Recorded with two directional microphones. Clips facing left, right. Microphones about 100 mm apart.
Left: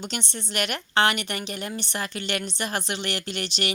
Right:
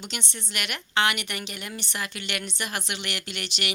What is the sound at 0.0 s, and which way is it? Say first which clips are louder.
A woman's voice: left 4 dB; 35° left (ahead or behind).